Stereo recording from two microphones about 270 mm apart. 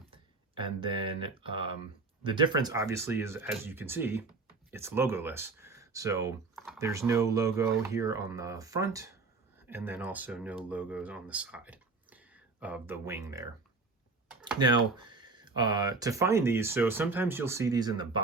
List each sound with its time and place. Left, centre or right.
0.1 s a sound: centre
1.4 s speech: centre
14.6 s speech: centre